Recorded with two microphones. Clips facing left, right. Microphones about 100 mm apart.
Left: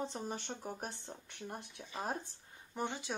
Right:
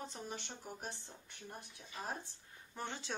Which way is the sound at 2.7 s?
15° left (ahead or behind).